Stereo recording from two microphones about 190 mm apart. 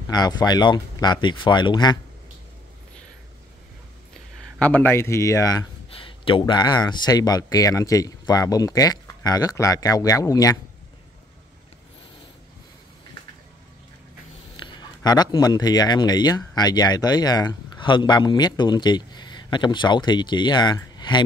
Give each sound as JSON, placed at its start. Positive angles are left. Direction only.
{"t": 0.1, "sound": "a man's voice", "side_deg": 20}
{"t": 4.6, "sound": "a man's voice", "side_deg": 10}
{"t": 14.6, "sound": "speech", "side_deg": 25}